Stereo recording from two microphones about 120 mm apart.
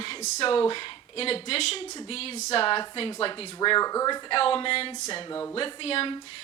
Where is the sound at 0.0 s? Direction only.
50° left (ahead or behind); by 4.4 s 35° left (ahead or behind).